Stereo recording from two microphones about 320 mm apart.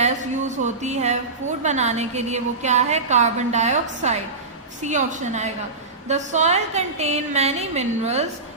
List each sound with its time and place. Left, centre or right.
0.0 s a woman's voice: right